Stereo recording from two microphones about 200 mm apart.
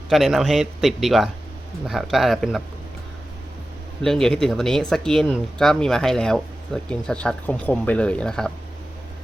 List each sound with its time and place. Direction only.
0.1 s speech: centre (ahead or behind)
4.0 s speech: 5° left (ahead or behind)